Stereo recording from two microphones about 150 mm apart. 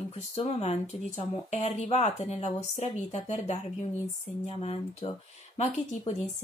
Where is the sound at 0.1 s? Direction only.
40° left (ahead or behind).